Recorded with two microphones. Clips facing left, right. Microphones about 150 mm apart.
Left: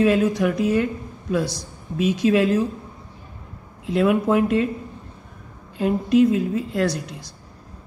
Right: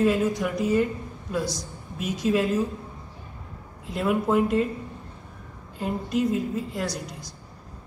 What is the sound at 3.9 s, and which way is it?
Speech, 85° left.